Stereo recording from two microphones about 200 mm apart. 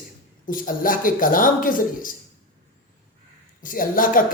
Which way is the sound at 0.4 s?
45° left (ahead or behind).